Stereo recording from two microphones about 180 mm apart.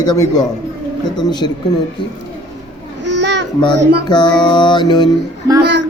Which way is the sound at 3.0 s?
75° right (ahead or behind).